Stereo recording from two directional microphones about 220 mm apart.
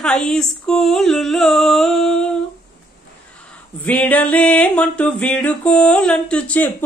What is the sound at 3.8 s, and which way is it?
Music, 5° left (ahead or behind).